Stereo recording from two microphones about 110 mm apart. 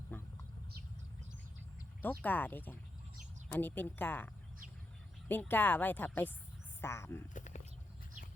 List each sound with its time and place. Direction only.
0.1 s a sound: 15° left (ahead or behind)
2.0 s a woman's voice: 15° left (ahead or behind)
5.3 s a woman's voice: 15° left (ahead or behind)